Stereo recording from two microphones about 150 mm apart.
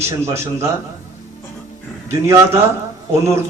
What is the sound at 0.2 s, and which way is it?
Speech, 20° right (ahead or behind).